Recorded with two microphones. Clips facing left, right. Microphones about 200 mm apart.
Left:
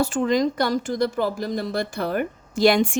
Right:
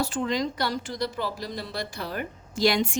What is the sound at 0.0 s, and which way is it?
Speech, 45° left (ahead or behind).